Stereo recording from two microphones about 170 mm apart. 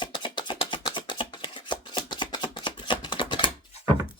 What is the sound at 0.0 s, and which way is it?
Chopping, 25° left (ahead or behind).